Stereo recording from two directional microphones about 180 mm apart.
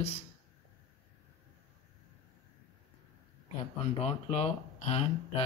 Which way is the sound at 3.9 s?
35° left (ahead or behind).